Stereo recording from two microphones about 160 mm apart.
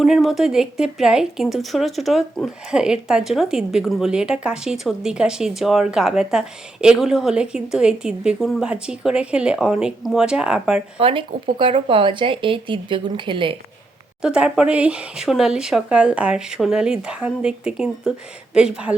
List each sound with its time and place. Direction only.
0.0 s a woman's voice: centre (ahead or behind)
10.9 s speech: 30° right (ahead or behind)
14.2 s a woman's voice: 5° right (ahead or behind)